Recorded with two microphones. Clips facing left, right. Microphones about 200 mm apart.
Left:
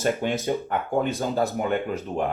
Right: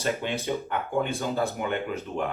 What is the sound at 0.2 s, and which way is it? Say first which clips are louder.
Speech: left 5 dB; 45° left (ahead or behind).